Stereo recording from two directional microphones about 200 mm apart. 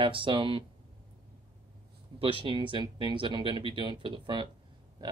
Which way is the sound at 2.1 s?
25° right (ahead or behind).